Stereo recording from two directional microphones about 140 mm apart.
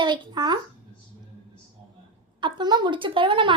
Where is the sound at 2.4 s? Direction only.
30° right (ahead or behind).